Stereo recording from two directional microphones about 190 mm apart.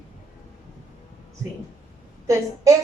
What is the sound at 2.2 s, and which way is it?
Speech, 15° right (ahead or behind).